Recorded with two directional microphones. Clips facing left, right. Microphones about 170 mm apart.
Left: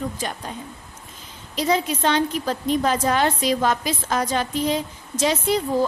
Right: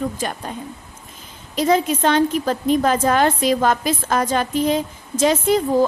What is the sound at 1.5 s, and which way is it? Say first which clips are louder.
A woman's voice: right 4 dB; 50° right (ahead or behind).